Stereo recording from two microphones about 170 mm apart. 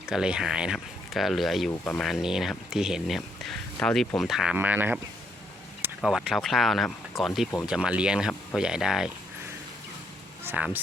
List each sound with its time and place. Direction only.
0.0 s speech: 5° right (ahead or behind)
6.0 s speech: centre (ahead or behind)
10.4 s speech: 10° right (ahead or behind)